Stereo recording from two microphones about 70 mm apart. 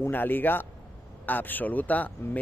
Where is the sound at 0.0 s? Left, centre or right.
Left.